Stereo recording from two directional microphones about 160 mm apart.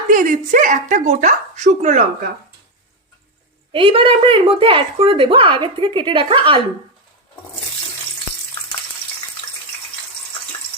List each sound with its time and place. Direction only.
0.1 s a woman's voice: 55° right (ahead or behind)
3.7 s speech: 35° right (ahead or behind)